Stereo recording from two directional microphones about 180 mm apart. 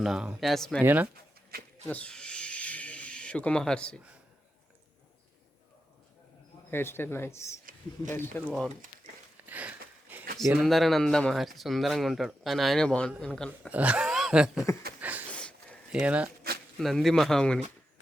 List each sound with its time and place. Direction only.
0.0 s speech: 5° right (ahead or behind)
0.8 s speech: 10° right (ahead or behind)
1.5 s a sound: 55° right (ahead or behind)
1.9 s a sound: 5° left (ahead or behind)
6.7 s speech: 10° left (ahead or behind)
7.6 s speech: 50° right (ahead or behind)
8.1 s speech: 10° left (ahead or behind)
9.5 s a sound: 10° right (ahead or behind)
10.3 s speech: centre (ahead or behind)
13.7 s a sound: 5° right (ahead or behind)
15.3 s sniff: 5° left (ahead or behind)
15.9 s speech: 5° right (ahead or behind)